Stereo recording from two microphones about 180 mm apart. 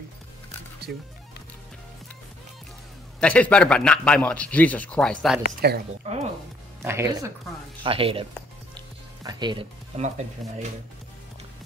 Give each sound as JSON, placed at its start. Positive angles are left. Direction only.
{"t": 3.2, "sound": "a man's voice", "side_deg": 5}
{"t": 5.6, "sound": "speech", "side_deg": -60}
{"t": 6.0, "sound": "speech", "side_deg": -35}
{"t": 6.8, "sound": "speech", "side_deg": -15}
{"t": 7.8, "sound": "speech", "side_deg": -30}
{"t": 8.7, "sound": "music", "side_deg": -25}
{"t": 9.9, "sound": "speech", "side_deg": -40}